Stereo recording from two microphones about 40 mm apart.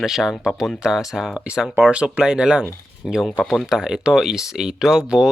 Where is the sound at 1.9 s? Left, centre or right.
Right.